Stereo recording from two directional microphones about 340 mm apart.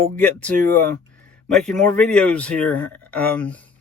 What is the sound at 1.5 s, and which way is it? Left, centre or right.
Speech, centre.